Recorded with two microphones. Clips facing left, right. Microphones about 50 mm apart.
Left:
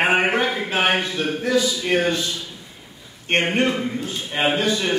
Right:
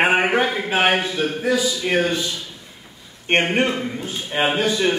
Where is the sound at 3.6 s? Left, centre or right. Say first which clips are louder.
Left 1 dB; centre.